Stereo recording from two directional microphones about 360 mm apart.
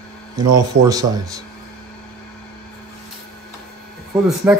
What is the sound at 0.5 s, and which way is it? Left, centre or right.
Speech, centre.